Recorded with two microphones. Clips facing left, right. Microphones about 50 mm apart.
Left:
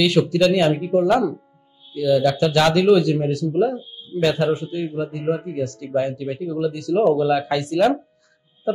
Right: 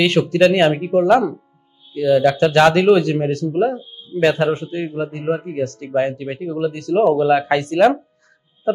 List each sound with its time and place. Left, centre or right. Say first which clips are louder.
0.2 s speech: right 5 dB; right